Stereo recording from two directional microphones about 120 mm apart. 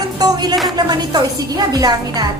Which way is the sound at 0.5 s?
Centre (ahead or behind).